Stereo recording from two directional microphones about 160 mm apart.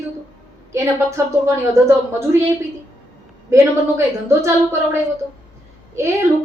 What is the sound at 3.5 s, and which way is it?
A woman's voice, 15° right (ahead or behind).